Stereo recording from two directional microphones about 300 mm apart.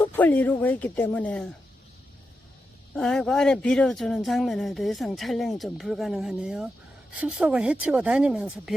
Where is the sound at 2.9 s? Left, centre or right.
Centre.